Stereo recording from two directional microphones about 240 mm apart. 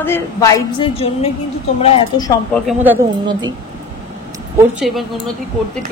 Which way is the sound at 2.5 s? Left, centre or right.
Centre.